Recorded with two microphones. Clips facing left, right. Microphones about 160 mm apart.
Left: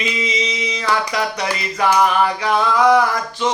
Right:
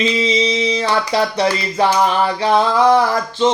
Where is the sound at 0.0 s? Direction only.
30° right (ahead or behind).